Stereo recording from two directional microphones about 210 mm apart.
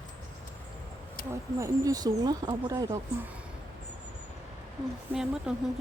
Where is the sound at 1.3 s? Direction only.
15° right (ahead or behind).